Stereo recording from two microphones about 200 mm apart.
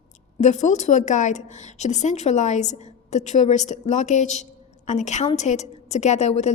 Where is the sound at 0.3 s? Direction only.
35° left (ahead or behind).